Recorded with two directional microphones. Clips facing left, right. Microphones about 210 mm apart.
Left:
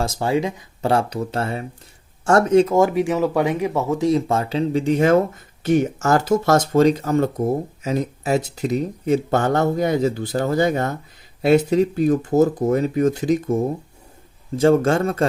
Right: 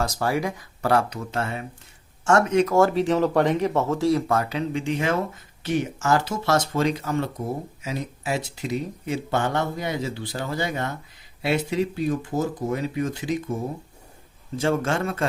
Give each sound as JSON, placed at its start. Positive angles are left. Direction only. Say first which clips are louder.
{"t": 0.0, "sound": "speech", "louder": "left 4 dB", "side_deg": 25}
{"t": 2.7, "sound": "speech", "louder": "left 2 dB", "side_deg": 15}
{"t": 14.6, "sound": "speech", "louder": "left 8 dB", "side_deg": 40}